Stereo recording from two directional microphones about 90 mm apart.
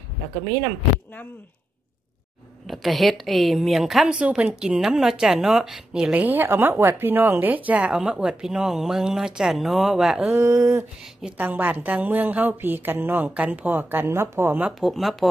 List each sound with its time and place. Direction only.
2.7 s a woman's voice: centre (ahead or behind)
6.1 s speech: 20° right (ahead or behind); by 10.3 s centre (ahead or behind)
10.3 s speech: 30° right (ahead or behind)
11.2 s a woman's voice: 20° right (ahead or behind)
14.8 s a woman's voice: centre (ahead or behind)